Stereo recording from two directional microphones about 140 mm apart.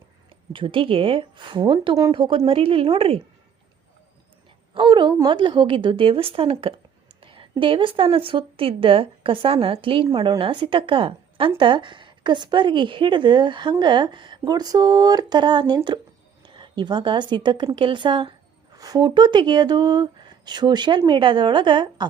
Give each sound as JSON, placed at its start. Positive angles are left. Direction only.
{"t": 0.5, "sound": "a woman's voice", "side_deg": -40}
{"t": 4.7, "sound": "a woman's voice", "side_deg": -35}
{"t": 7.2, "sound": "a sound", "side_deg": -40}
{"t": 7.6, "sound": "a woman's voice", "side_deg": -35}